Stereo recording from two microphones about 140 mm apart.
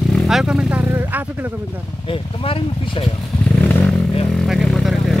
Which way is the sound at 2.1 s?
40° left (ahead or behind).